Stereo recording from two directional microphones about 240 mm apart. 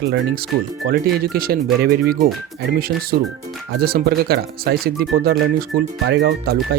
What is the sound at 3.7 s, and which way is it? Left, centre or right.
Speech, right.